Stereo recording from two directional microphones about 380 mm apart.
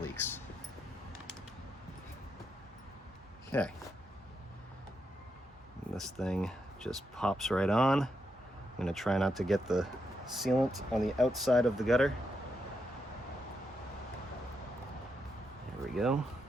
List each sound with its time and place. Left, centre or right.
0.0 s a sound: centre
6.0 s speech: centre
16.0 s speech: centre